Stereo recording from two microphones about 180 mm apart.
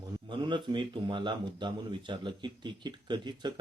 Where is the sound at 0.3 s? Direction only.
25° right (ahead or behind).